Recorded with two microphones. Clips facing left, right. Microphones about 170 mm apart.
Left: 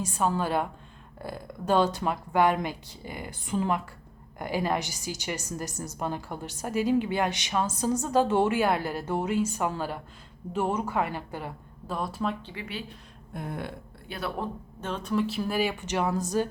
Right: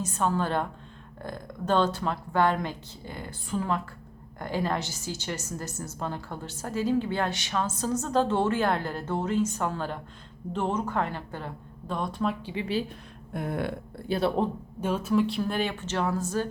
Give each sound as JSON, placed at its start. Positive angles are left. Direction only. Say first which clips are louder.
{"t": 0.0, "sound": "a woman's voice", "louder": "even", "side_deg": 10}
{"t": 12.5, "sound": "speech", "louder": "right 9 dB", "side_deg": -30}
{"t": 13.3, "sound": "a sound", "louder": "right 5 dB", "side_deg": -70}
{"t": 14.1, "sound": "speech", "louder": "right 7 dB", "side_deg": -25}
{"t": 14.8, "sound": "a woman's voice", "louder": "right 4 dB", "side_deg": -10}